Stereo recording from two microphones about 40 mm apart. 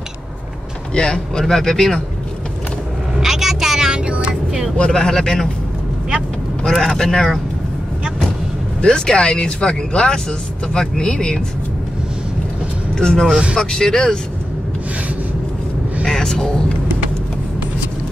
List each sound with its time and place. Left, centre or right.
0.9 s speech: centre
1.4 s speech: centre
3.2 s vehicle: centre
4.0 s vehicle: right
4.7 s speech: left
6.7 s speech: centre
8.8 s speech: centre
12.9 s speech: centre
16.0 s a sound: centre